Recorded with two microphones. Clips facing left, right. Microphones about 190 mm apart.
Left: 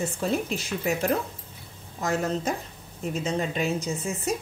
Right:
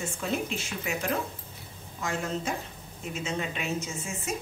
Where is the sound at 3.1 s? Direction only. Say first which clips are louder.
Left 5 dB; 35° left (ahead or behind).